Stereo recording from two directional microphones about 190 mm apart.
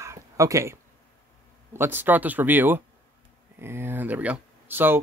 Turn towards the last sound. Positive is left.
turn(degrees=-10)  # may be behind; listen again after turning